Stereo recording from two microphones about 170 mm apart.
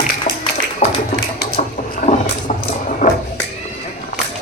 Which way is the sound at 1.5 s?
55° left (ahead or behind).